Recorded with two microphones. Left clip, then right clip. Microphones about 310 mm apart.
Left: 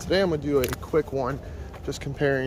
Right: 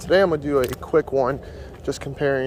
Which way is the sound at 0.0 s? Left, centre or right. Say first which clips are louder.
Right 6 dB; centre.